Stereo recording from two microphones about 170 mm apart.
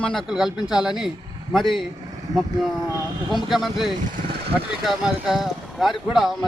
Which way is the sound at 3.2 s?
Centre (ahead or behind).